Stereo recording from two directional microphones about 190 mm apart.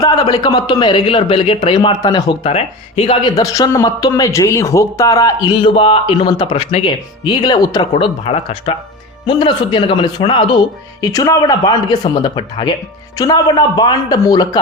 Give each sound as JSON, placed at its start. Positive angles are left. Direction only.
{"t": 0.0, "sound": "speech", "side_deg": 20}
{"t": 2.4, "sound": "speech", "side_deg": 30}